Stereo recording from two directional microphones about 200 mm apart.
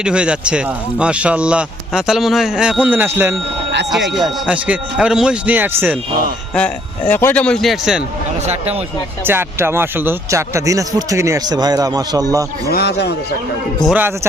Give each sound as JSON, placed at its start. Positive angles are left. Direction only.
{"t": 0.0, "sound": "speech", "side_deg": -5}
{"t": 3.9, "sound": "a man's voice", "side_deg": 0}
{"t": 6.5, "sound": "speech", "side_deg": 5}
{"t": 8.4, "sound": "speech", "side_deg": -30}
{"t": 9.2, "sound": "a man's voice", "side_deg": -10}
{"t": 12.7, "sound": "a man's voice", "side_deg": 55}
{"t": 13.8, "sound": "a man's voice", "side_deg": -5}